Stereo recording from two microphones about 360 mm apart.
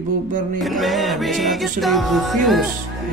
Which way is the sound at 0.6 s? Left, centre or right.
Centre.